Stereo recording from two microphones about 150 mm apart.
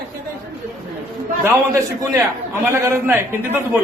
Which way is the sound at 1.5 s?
20° right (ahead or behind).